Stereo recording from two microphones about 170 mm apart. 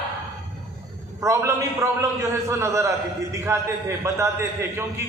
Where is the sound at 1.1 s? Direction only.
15° right (ahead or behind).